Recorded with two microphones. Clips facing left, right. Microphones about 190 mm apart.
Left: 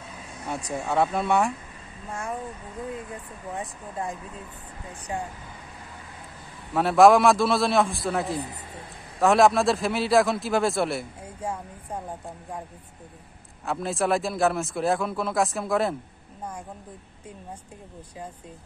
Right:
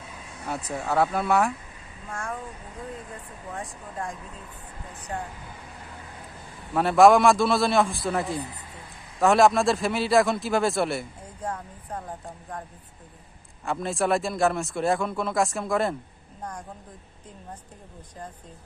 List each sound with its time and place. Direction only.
0.7 s a man's voice: centre (ahead or behind)
3.5 s a man's voice: 5° left (ahead or behind)
6.7 s a man's voice: centre (ahead or behind)
13.7 s a man's voice: centre (ahead or behind)